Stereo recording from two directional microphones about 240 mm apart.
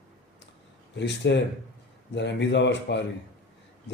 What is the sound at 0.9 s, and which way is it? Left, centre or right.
A man's voice, left.